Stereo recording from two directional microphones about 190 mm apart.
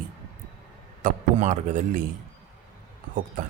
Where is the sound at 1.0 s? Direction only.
40° right (ahead or behind).